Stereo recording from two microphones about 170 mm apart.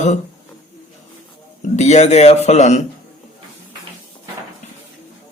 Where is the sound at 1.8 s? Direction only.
40° left (ahead or behind).